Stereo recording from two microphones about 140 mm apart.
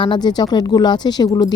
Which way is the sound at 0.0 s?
30° left (ahead or behind).